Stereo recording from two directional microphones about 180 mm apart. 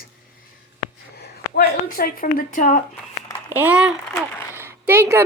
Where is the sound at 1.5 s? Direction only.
55° left (ahead or behind).